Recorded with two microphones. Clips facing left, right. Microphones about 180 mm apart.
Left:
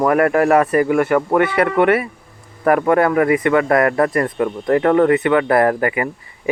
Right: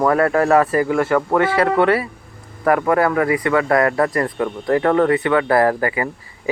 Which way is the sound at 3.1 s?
25° left (ahead or behind).